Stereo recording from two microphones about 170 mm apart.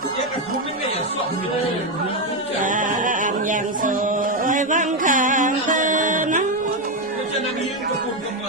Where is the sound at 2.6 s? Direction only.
50° right (ahead or behind).